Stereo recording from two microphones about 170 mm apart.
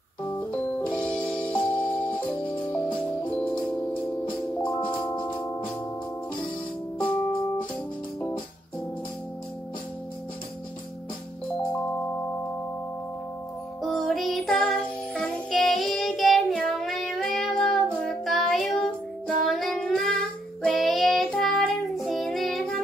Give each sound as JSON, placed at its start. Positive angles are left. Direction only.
{"t": 0.2, "sound": "music", "side_deg": 10}
{"t": 5.1, "sound": "music", "side_deg": 30}
{"t": 7.0, "sound": "organ", "side_deg": 5}
{"t": 11.4, "sound": "music", "side_deg": 10}
{"t": 13.8, "sound": "music", "side_deg": 0}
{"t": 20.6, "sound": "child singing", "side_deg": 0}